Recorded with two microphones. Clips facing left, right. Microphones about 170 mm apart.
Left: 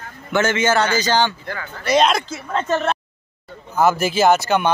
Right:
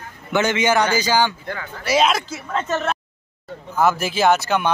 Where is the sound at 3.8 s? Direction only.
Centre (ahead or behind).